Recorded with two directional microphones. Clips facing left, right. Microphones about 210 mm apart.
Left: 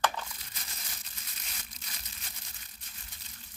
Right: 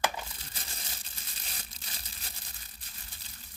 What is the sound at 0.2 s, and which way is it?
Crumpling, 30° right (ahead or behind).